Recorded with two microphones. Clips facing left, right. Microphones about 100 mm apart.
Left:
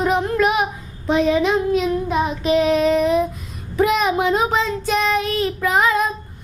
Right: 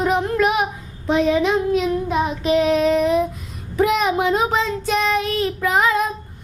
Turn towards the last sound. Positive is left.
turn(degrees=10)  # may be behind; listen again after turning